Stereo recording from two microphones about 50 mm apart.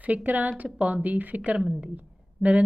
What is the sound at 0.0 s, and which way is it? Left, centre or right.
A woman's voice, right.